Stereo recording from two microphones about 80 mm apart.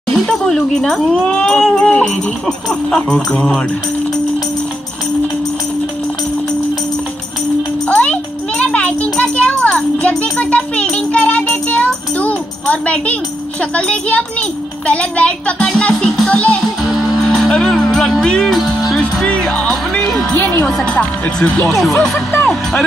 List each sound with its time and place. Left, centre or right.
0.1 s speech: centre
7.9 s music: centre
14.9 s speech: centre
16.9 s music: centre
20.3 s speech: left
20.7 s speech: centre